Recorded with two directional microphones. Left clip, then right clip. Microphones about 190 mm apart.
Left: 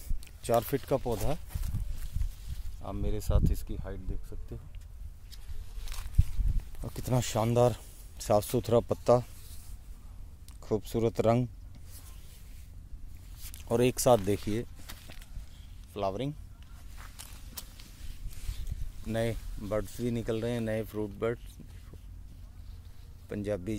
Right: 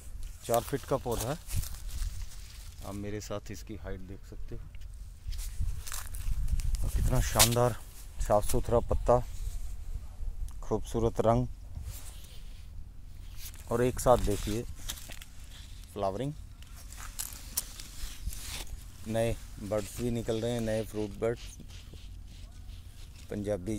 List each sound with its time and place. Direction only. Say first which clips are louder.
0.4 s speech: left 2 dB; 35° left (ahead or behind)
2.8 s speech: left 1 dB; 25° left (ahead or behind)
7.1 s speech: right 3 dB; 20° left (ahead or behind)
8.3 s speech: left 1 dB; 35° left (ahead or behind)
10.6 s speech: left 1 dB; 15° left (ahead or behind)
13.7 s speech: left 1 dB; 30° left (ahead or behind)
14.9 s a sound: right 6 dB; 60° right (ahead or behind)
15.9 s speech: even; 5° right (ahead or behind)
17.0 s biting: right 6 dB; 60° right (ahead or behind)
19.0 s speech: right 2 dB; 5° left (ahead or behind)
23.2 s speech: even; 5° left (ahead or behind)